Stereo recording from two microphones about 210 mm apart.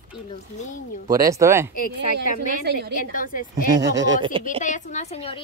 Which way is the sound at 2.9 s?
40° left (ahead or behind).